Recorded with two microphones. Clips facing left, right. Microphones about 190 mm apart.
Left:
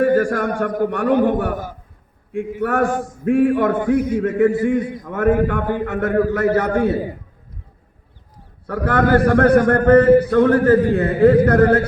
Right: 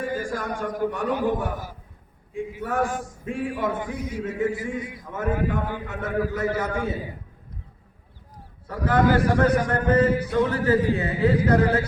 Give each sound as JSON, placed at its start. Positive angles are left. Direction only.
{"t": 0.0, "sound": "a man's voice", "side_deg": 65}
{"t": 8.6, "sound": "a man's voice", "side_deg": 60}